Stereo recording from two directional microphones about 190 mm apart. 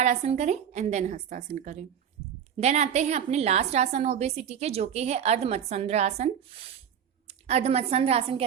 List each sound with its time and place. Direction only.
0.0 s a woman's voice: 35° right (ahead or behind)